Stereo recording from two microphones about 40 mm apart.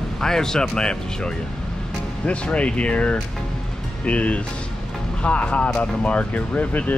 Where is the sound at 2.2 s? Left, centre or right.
Left.